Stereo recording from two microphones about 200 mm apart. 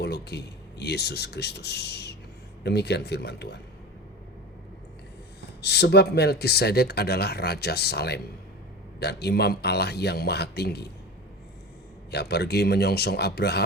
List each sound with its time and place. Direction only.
0.0 s speech: 55° left (ahead or behind)
5.6 s speech: 55° left (ahead or behind)
12.1 s speech: 55° left (ahead or behind)